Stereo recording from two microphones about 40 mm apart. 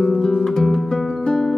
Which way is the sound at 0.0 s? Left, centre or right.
Centre.